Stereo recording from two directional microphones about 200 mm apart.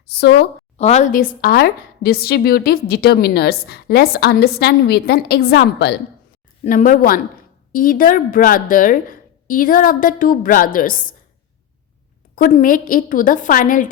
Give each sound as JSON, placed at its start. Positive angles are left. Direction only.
{"t": 0.1, "sound": "speech", "side_deg": 55}
{"t": 0.8, "sound": "a woman's voice", "side_deg": 35}
{"t": 6.7, "sound": "a woman's voice", "side_deg": 40}
{"t": 12.4, "sound": "a woman's voice", "side_deg": 40}